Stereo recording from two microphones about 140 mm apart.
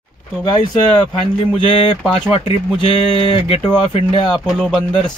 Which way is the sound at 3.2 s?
45° left (ahead or behind).